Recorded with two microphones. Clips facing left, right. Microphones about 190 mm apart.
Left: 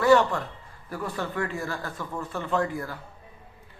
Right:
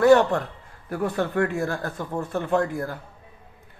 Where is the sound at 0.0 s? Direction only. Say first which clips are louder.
Right 4 dB; 50° right (ahead or behind).